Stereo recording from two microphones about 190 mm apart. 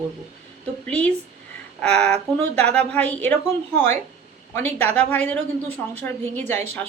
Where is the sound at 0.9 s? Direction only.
5° left (ahead or behind).